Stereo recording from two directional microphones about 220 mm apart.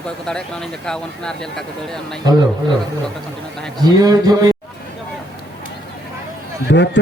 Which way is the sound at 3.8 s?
15° right (ahead or behind).